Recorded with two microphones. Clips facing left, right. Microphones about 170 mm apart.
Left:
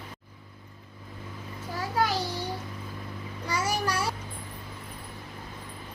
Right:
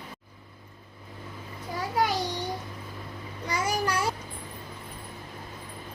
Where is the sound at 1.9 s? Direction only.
15° right (ahead or behind).